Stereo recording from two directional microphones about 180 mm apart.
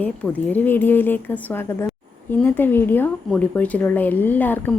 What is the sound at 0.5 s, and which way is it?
Speech, 10° left (ahead or behind).